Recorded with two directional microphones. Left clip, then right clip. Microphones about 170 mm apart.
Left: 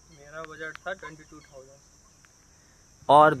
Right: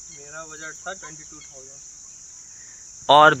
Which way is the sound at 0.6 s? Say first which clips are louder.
Right 1 dB; 25° left (ahead or behind).